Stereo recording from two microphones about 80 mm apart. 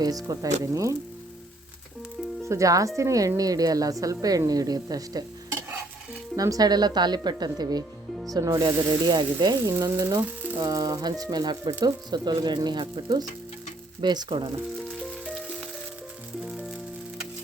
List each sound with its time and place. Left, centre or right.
0.0 s speech: right
2.4 s speech: right
6.3 s speech: right
14.0 s speech: right
14.8 s music: centre